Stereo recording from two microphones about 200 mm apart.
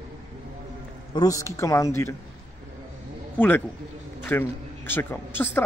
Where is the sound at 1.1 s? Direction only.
15° left (ahead or behind).